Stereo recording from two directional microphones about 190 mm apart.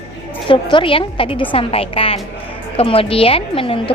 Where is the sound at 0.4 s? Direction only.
25° left (ahead or behind).